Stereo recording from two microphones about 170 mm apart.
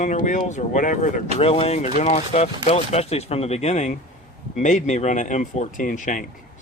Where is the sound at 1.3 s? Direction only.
35° left (ahead or behind).